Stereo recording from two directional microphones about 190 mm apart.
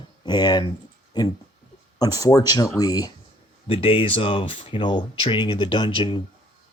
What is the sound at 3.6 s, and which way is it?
Speech, 30° left (ahead or behind).